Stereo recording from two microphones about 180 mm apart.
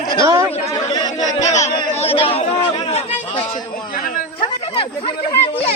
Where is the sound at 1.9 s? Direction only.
35° left (ahead or behind).